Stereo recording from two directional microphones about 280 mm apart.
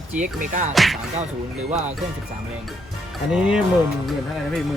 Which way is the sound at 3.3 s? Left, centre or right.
Centre.